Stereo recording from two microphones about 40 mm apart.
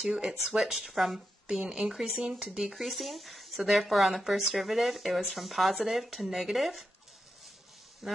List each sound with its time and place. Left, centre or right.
0.3 s speech: centre
2.7 s speech: centre
8.0 s speech: centre